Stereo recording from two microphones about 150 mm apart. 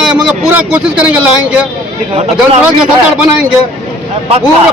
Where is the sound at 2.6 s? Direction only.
5° right (ahead or behind).